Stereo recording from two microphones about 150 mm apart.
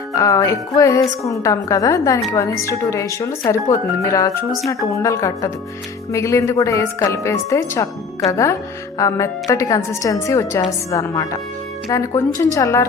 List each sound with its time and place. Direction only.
0.1 s speech: 20° left (ahead or behind)